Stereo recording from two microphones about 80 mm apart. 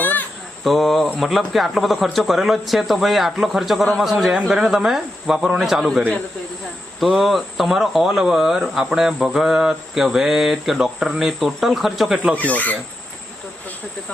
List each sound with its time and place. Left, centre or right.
0.0 s a sound: left
0.6 s speech: centre
7.0 s speech: centre
12.4 s speech: left